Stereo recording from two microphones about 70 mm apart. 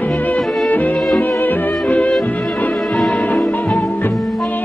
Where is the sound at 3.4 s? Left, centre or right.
Centre.